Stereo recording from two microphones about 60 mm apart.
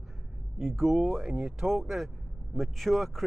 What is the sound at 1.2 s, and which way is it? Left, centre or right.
Speech, right.